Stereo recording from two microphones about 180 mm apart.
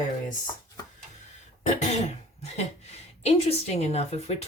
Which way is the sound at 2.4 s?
35° left (ahead or behind).